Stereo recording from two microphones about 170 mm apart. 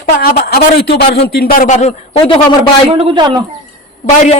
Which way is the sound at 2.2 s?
30° left (ahead or behind).